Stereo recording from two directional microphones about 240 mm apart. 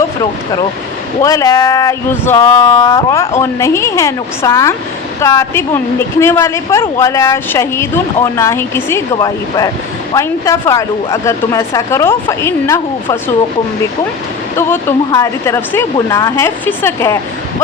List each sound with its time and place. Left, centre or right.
1.2 s a woman's voice: centre
14.5 s a woman's voice: centre